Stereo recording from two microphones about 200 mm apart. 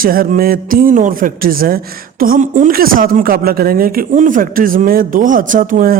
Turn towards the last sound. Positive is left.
turn(degrees=-45)  # may be behind; listen again after turning